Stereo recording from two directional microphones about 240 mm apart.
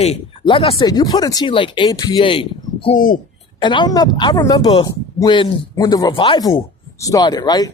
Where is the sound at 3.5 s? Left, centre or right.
Centre.